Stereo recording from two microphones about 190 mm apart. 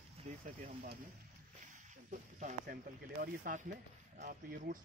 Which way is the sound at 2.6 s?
50° right (ahead or behind).